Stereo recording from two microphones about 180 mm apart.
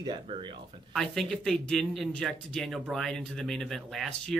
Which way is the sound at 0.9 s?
Centre (ahead or behind).